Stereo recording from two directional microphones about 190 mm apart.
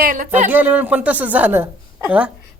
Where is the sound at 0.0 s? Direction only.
45° right (ahead or behind).